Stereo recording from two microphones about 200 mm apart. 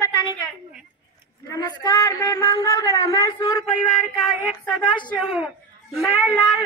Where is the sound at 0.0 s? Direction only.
20° left (ahead or behind).